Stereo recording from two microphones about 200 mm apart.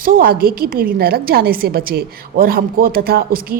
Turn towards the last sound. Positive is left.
turn(degrees=-45)  # may be behind; listen again after turning